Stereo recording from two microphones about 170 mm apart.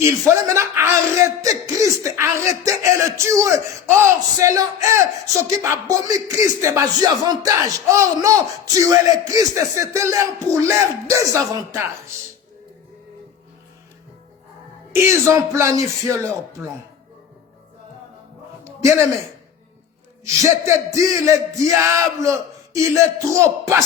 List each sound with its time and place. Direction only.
0.0 s a man's voice: 15° right (ahead or behind)
14.9 s a man's voice: 15° right (ahead or behind)
16.6 s speech: 5° right (ahead or behind)
18.6 s a sound: 15° right (ahead or behind)
20.2 s a man's voice: 20° right (ahead or behind)